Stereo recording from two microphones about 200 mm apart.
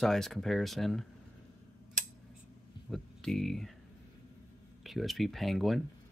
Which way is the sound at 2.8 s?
Centre (ahead or behind).